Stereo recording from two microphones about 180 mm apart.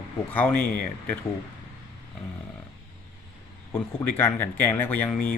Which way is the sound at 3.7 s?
10° left (ahead or behind).